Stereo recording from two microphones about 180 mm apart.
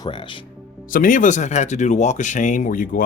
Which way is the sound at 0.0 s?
25° left (ahead or behind).